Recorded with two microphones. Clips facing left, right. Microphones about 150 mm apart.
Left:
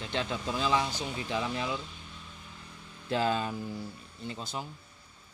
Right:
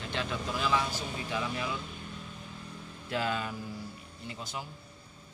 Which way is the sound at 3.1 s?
30° left (ahead or behind).